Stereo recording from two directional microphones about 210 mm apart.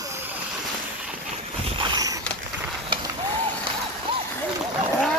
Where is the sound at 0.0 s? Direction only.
15° right (ahead or behind).